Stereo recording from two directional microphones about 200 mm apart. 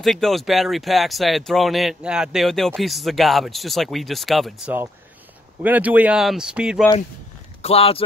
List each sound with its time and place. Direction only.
0.0 s speech: centre (ahead or behind)
7.6 s speech: 30° left (ahead or behind)